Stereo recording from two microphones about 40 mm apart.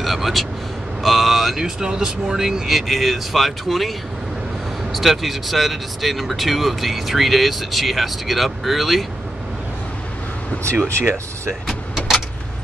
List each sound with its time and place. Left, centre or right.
0.0 s speech: centre
1.8 s speech: centre
4.9 s speech: centre
11.0 s speech: right
11.6 s vehicle: centre